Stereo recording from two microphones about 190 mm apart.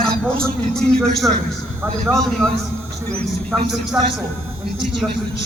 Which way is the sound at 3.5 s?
10° right (ahead or behind).